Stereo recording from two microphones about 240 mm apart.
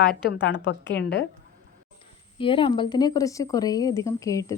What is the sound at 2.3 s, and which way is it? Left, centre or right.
Speech, left.